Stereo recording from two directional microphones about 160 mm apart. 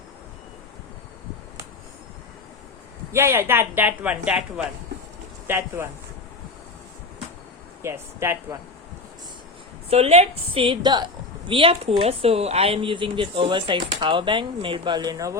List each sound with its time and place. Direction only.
3.1 s speech: 15° right (ahead or behind)
7.8 s speech: 15° right (ahead or behind)
9.9 s a woman's voice: 40° right (ahead or behind); by 15.4 s 20° right (ahead or behind)